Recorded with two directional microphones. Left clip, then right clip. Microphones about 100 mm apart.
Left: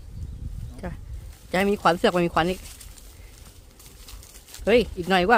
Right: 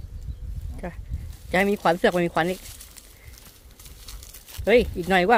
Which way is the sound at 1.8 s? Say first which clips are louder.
Even; 15° left (ahead or behind).